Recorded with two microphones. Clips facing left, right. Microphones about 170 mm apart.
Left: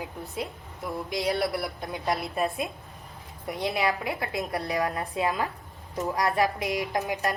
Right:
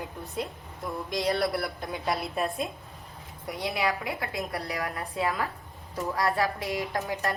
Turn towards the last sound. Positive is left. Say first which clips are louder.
# left 2 dB
turn(degrees=15)  # may be behind; listen again after turning